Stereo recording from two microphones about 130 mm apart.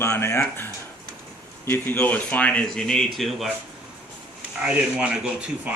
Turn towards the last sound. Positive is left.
turn(degrees=-5)  # may be behind; listen again after turning